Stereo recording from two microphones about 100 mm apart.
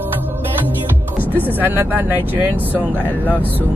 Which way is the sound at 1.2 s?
20° right (ahead or behind).